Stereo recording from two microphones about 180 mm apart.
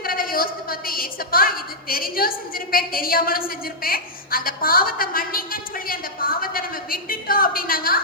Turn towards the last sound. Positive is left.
turn(degrees=55)  # may be behind; listen again after turning